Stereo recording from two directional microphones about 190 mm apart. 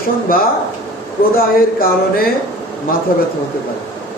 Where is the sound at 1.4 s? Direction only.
50° left (ahead or behind).